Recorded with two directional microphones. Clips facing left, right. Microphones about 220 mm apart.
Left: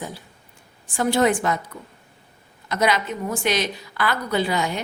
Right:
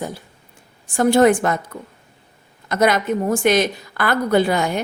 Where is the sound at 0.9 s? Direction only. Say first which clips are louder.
Right 6 dB; 45° right (ahead or behind).